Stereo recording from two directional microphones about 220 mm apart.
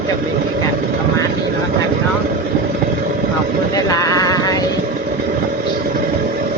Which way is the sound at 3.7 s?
15° left (ahead or behind).